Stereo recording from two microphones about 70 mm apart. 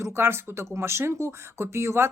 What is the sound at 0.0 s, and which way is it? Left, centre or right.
Speech, right.